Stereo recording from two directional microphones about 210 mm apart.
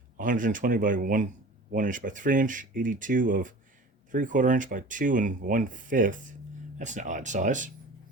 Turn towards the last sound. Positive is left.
turn(degrees=-35)  # may be behind; listen again after turning